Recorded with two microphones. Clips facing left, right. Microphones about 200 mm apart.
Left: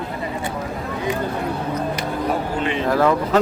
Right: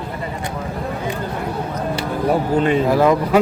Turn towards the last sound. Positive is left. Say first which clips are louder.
# right 3 dB
turn(degrees=-10)  # may be behind; listen again after turning